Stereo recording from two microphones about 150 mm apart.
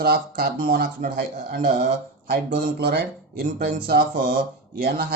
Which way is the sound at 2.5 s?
90° right.